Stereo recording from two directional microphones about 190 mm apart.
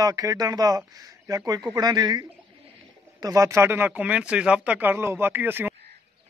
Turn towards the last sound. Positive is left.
turn(degrees=-10)  # may be behind; listen again after turning